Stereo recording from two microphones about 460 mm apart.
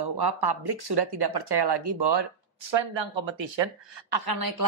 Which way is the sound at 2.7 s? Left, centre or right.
Right.